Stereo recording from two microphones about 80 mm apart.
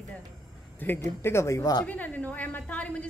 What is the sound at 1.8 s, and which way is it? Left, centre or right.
A woman's voice, left.